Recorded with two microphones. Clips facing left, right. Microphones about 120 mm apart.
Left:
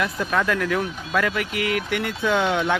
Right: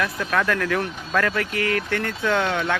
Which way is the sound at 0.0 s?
10° left (ahead or behind).